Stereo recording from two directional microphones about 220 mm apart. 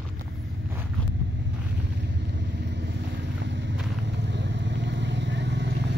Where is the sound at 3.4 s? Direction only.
55° right (ahead or behind).